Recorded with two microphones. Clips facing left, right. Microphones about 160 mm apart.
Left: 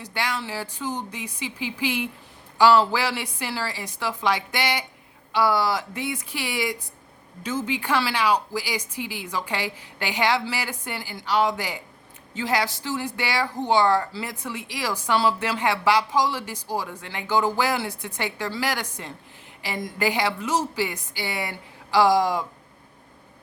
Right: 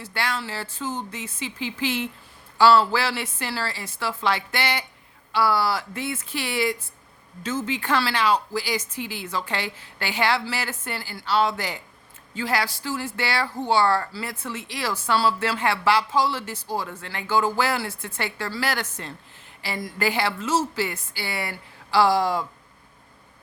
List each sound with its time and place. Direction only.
0.0 s speech: 15° left (ahead or behind)